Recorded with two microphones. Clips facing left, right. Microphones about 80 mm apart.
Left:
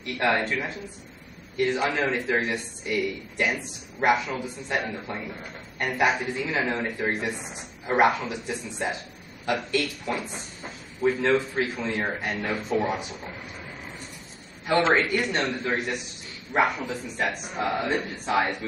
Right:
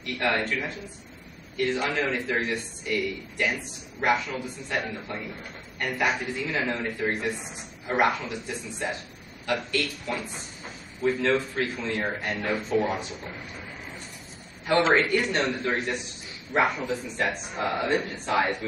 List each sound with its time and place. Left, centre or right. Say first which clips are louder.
0.0 s a man's voice: left 2 dB; centre
1.7 s a man's voice: left 1 dB; centre
12.4 s a man's voice: right 1 dB; centre
14.7 s a man's voice: even; centre